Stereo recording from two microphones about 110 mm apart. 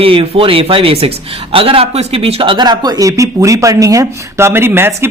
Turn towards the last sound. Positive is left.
turn(degrees=-20)  # may be behind; listen again after turning